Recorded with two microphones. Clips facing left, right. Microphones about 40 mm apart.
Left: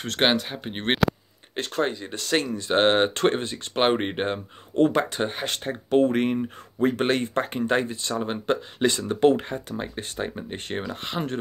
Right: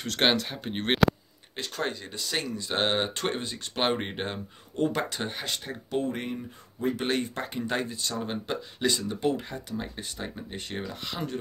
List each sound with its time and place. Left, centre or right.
0.2 s speech: centre
5.5 s speech: left
7.0 s speech: left
8.5 s speech: left